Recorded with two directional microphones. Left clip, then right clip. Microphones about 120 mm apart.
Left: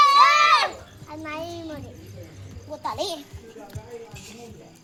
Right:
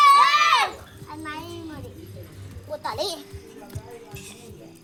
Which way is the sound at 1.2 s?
45° left (ahead or behind).